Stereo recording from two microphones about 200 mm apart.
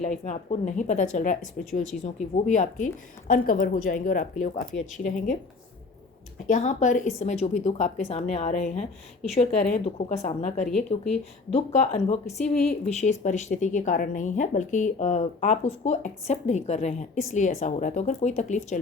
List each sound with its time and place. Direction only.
0.0 s speech: 35° left (ahead or behind)
1.8 s speech: centre (ahead or behind)
2.3 s speech: 35° left (ahead or behind)
6.5 s speech: 35° left (ahead or behind)
12.4 s speech: 5° left (ahead or behind)
12.8 s speech: 35° left (ahead or behind)